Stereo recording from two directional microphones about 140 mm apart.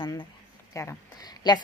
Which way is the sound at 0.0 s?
35° left (ahead or behind).